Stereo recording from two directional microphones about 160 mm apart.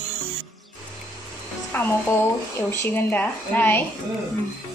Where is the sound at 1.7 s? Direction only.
10° left (ahead or behind).